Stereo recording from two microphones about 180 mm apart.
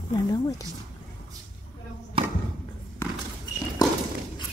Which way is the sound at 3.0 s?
15° left (ahead or behind).